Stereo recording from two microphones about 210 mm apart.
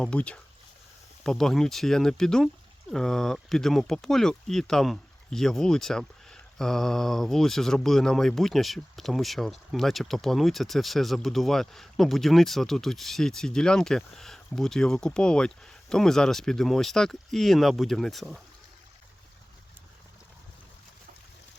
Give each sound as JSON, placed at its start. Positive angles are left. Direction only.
{"t": 0.0, "sound": "speech", "side_deg": 5}